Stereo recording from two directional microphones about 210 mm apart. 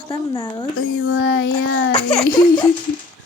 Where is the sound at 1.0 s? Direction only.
70° left (ahead or behind).